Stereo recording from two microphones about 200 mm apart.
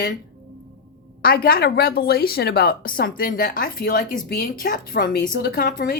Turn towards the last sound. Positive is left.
turn(degrees=50)  # may be behind; listen again after turning